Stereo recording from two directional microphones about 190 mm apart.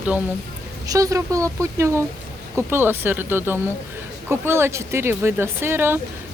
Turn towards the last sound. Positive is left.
turn(degrees=-10)  # may be behind; listen again after turning